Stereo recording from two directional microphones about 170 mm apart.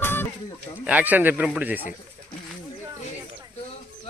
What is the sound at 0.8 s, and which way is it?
Speech, 10° right (ahead or behind).